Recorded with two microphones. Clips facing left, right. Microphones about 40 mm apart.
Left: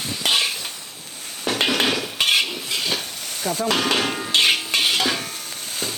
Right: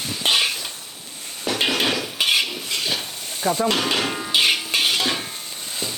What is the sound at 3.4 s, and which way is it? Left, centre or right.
Speech, right.